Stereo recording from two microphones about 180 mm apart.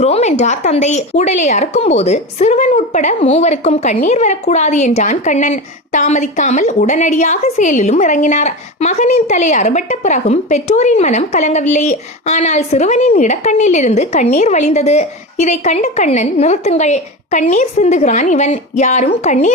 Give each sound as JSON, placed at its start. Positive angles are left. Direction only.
{"t": 0.0, "sound": "speech", "side_deg": 35}